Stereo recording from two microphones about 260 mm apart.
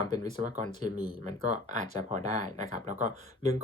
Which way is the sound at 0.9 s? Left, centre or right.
Centre.